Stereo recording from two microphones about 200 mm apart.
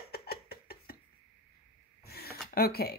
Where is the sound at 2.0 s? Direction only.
50° left (ahead or behind).